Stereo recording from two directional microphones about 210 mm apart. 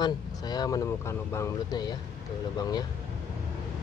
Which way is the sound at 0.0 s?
20° left (ahead or behind).